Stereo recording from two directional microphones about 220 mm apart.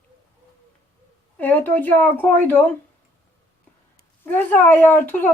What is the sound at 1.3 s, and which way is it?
A woman's voice, 10° left (ahead or behind).